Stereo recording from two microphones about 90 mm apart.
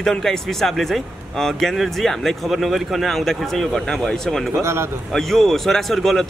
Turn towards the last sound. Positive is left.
turn(degrees=0)  # may be behind; listen again after turning